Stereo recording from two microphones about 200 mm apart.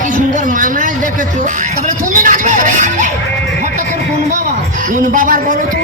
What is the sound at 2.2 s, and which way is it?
Music, 40° right (ahead or behind).